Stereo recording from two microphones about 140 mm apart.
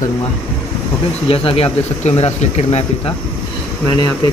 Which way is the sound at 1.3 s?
45° left (ahead or behind).